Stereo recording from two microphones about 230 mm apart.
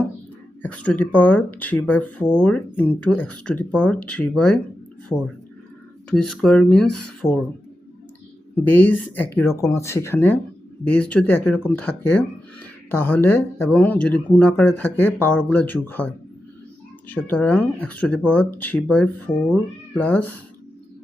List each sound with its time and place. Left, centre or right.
0.6 s speech: centre
6.1 s speech: centre
8.6 s speech: centre
17.1 s speech: centre